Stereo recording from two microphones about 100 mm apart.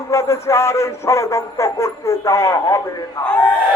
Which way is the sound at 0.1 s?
30° left (ahead or behind).